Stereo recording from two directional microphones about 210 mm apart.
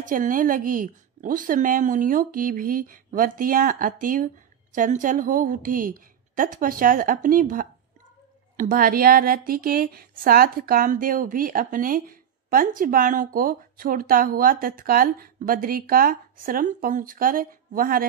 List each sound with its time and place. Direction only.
0.1 s a woman's voice: 40° right (ahead or behind)